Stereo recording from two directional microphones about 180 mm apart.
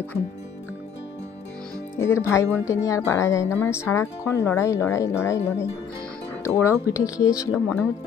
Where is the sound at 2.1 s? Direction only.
15° left (ahead or behind).